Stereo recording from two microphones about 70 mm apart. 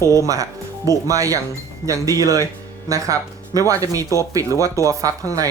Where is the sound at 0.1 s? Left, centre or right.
Right.